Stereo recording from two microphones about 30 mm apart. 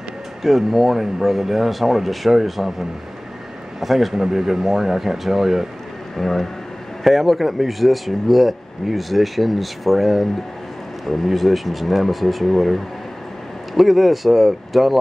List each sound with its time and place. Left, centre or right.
0.4 s speech: centre
3.8 s speech: centre
6.1 s speech: centre